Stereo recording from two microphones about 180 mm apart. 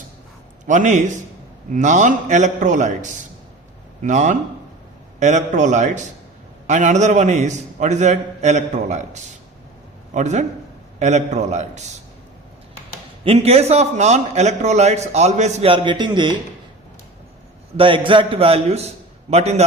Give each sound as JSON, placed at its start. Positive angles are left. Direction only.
{"t": 0.6, "sound": "a man's voice", "side_deg": -45}
{"t": 13.2, "sound": "a man's voice", "side_deg": -35}
{"t": 17.7, "sound": "a man's voice", "side_deg": -30}